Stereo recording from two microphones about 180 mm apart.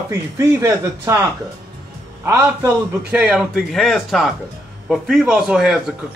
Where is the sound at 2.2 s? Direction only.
15° right (ahead or behind).